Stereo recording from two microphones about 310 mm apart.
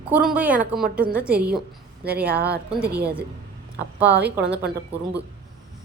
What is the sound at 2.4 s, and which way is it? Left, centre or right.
Speech, right.